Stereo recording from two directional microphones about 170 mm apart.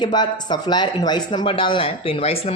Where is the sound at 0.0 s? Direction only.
25° left (ahead or behind).